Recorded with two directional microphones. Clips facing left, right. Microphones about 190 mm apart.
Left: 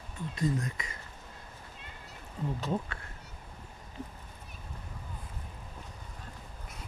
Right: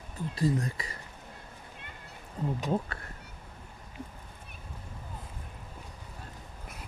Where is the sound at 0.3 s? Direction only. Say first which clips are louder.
Right 3 dB; 35° right (ahead or behind).